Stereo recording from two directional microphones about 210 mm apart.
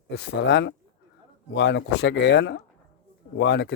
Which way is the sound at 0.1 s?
55° left (ahead or behind).